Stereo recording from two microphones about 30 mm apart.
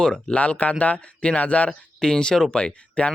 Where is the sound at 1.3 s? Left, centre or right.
Left.